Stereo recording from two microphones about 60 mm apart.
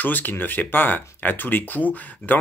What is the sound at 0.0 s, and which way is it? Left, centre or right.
Speech, left.